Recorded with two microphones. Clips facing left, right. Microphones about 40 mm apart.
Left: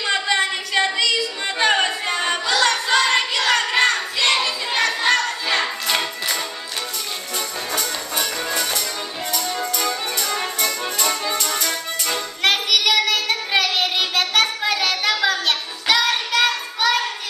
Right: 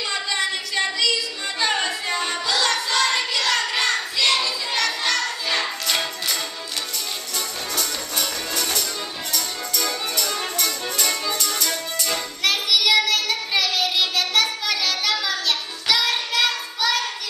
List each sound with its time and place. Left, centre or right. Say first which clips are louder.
0.0 s a sound: left 5 dB; left
4.4 s music: left 3 dB; left
7.7 s music: left 3 dB; centre
12.4 s child singing: left 2 dB; left